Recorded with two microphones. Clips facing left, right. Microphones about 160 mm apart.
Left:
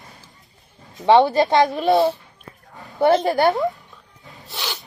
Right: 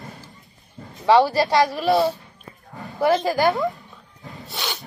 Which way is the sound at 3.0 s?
30° left (ahead or behind).